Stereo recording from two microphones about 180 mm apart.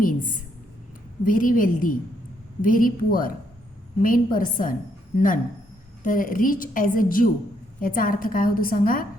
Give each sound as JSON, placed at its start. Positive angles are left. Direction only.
{"t": 1.2, "sound": "a woman's voice", "side_deg": 50}